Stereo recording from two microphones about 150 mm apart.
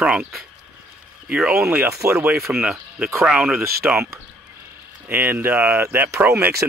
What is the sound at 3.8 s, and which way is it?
Speech, 15° right (ahead or behind).